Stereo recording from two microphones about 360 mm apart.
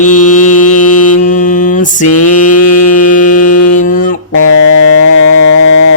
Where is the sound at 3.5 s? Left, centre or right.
Left.